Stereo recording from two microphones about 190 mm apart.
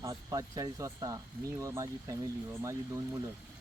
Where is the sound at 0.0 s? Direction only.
20° right (ahead or behind).